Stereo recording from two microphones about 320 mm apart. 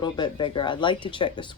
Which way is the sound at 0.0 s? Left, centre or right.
Centre.